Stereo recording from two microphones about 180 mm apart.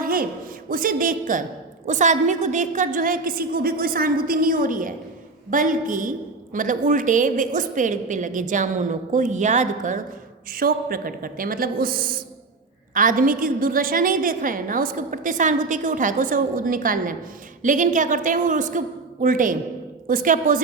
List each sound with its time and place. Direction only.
0.0 s a sound: 50° right (ahead or behind)
0.7 s a woman's voice: 50° right (ahead or behind)
10.5 s a woman's voice: 55° right (ahead or behind)